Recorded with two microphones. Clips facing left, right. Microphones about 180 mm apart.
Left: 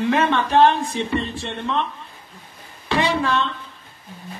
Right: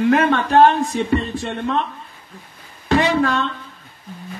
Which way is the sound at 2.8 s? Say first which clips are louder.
Right 4 dB; 45° right (ahead or behind).